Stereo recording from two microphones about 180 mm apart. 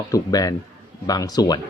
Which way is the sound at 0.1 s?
20° left (ahead or behind).